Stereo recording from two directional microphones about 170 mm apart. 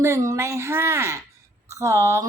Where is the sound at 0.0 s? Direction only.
15° right (ahead or behind).